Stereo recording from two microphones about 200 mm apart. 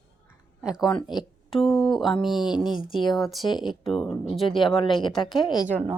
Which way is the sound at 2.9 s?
20° left (ahead or behind).